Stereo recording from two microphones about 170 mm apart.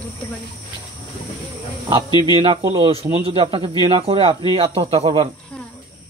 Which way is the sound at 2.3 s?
30° right (ahead or behind).